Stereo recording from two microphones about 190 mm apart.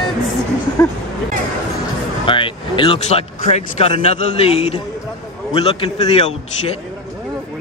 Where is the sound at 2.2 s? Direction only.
25° left (ahead or behind).